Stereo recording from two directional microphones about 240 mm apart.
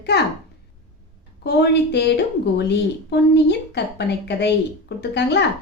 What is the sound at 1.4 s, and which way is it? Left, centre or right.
A woman's voice, left.